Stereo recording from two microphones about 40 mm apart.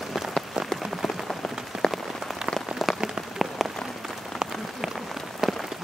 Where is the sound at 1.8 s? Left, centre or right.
Left.